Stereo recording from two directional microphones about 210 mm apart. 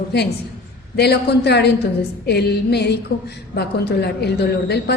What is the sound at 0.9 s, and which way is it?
A woman's voice, 50° left (ahead or behind).